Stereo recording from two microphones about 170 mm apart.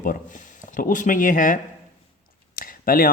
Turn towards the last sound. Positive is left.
turn(degrees=55)  # may be behind; listen again after turning